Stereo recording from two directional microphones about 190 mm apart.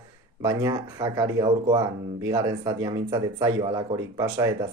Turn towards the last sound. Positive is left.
turn(degrees=-15)  # may be behind; listen again after turning